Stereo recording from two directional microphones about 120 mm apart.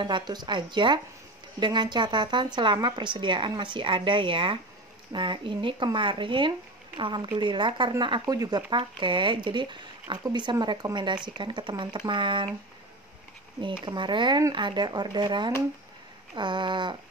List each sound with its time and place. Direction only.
0.0 s speech: 40° right (ahead or behind)
13.6 s speech: 40° right (ahead or behind)